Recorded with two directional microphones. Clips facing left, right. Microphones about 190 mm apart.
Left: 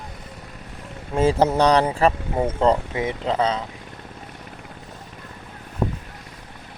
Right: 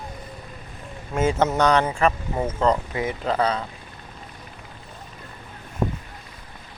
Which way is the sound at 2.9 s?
20° left (ahead or behind).